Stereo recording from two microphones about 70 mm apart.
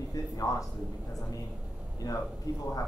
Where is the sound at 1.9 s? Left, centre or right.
Left.